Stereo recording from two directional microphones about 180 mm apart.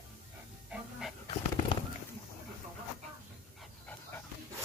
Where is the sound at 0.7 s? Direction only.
5° right (ahead or behind).